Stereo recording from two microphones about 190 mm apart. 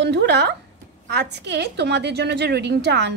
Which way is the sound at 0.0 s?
65° right (ahead or behind).